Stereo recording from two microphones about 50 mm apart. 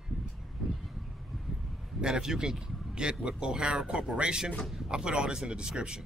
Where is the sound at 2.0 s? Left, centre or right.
Centre.